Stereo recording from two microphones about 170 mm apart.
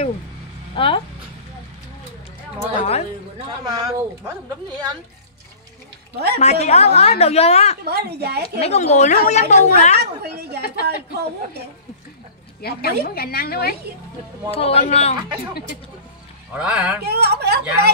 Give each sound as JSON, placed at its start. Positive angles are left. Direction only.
{"t": 0.7, "sound": "a woman's voice", "side_deg": 30}
{"t": 2.7, "sound": "a woman's voice", "side_deg": 35}
{"t": 3.3, "sound": "a woman's voice", "side_deg": -25}
{"t": 6.1, "sound": "a woman's voice", "side_deg": -70}
{"t": 6.4, "sound": "a woman's voice", "side_deg": 40}
{"t": 7.8, "sound": "a woman's voice", "side_deg": -70}
{"t": 8.4, "sound": "a woman's voice", "side_deg": 40}
{"t": 9.9, "sound": "a woman's voice", "side_deg": -75}
{"t": 12.6, "sound": "a woman's voice", "side_deg": 65}
{"t": 14.5, "sound": "a woman's voice", "side_deg": 35}
{"t": 16.5, "sound": "speech", "side_deg": -5}
{"t": 17.0, "sound": "a woman's voice", "side_deg": -70}